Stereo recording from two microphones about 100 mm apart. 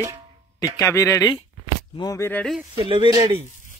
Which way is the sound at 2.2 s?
20° left (ahead or behind).